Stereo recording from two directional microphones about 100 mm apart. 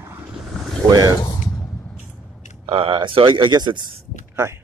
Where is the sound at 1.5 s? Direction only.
30° left (ahead or behind).